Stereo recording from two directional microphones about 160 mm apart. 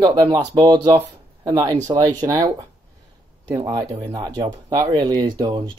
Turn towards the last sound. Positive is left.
turn(degrees=-25)  # may be behind; listen again after turning